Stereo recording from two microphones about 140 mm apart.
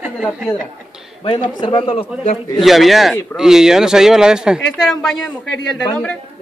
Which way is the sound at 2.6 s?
Centre (ahead or behind).